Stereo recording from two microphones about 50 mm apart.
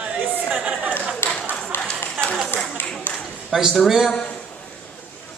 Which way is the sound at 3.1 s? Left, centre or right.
Left.